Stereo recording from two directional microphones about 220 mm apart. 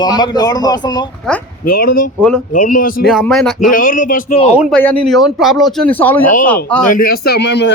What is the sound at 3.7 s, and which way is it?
Speech, 40° left (ahead or behind).